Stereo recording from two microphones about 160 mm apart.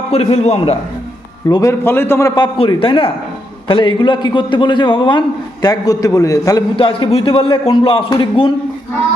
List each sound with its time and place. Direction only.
0.1 s a man's voice: 40° left (ahead or behind)
1.5 s a man's voice: 20° left (ahead or behind)
2.6 s a man's voice: 35° left (ahead or behind)
6.7 s a man's voice: 35° left (ahead or behind)